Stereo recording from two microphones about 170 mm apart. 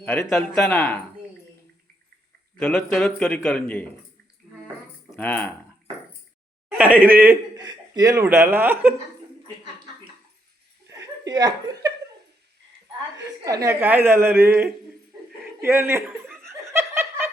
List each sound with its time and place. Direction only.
0.0 s a man's voice: 5° left (ahead or behind)
2.6 s a man's voice: 5° left (ahead or behind)
5.1 s speech: 10° left (ahead or behind)
6.7 s speech: 10° right (ahead or behind)
7.5 s speech: 25° right (ahead or behind)
10.8 s chuckle: 20° right (ahead or behind)
13.4 s a woman's voice: 20° right (ahead or behind)
16.4 s laughter: 15° right (ahead or behind)